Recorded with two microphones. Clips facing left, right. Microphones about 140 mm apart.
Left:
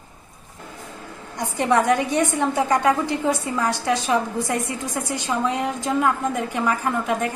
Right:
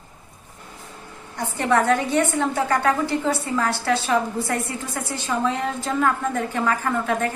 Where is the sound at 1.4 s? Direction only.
15° left (ahead or behind).